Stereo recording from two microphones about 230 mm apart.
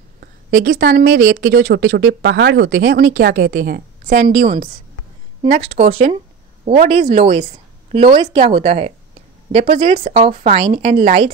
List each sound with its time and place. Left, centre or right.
0.2 s speech: right
5.4 s speech: right